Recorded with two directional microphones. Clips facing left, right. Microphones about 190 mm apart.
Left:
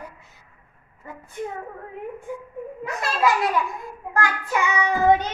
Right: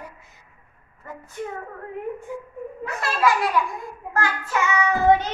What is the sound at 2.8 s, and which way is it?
Speech, 20° left (ahead or behind).